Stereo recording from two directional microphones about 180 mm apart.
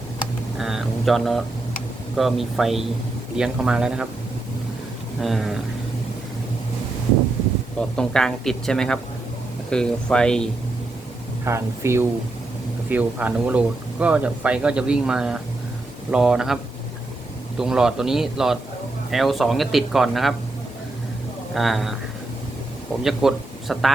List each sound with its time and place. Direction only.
0.6 s mantra: centre (ahead or behind)
2.1 s speech: centre (ahead or behind)
5.2 s speech: centre (ahead or behind)
7.8 s speech: 5° left (ahead or behind)
11.4 s speech: 15° right (ahead or behind)
17.6 s speech: 5° right (ahead or behind)
21.5 s speech: centre (ahead or behind)
23.0 s speech: centre (ahead or behind)